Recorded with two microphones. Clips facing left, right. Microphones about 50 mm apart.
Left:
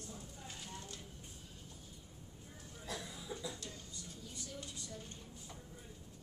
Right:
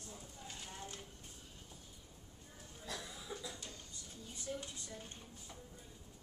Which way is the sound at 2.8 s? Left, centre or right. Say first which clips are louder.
Left 1 dB; centre.